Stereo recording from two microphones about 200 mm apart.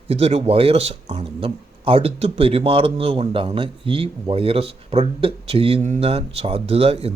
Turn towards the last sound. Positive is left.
turn(degrees=-30)  # may be behind; listen again after turning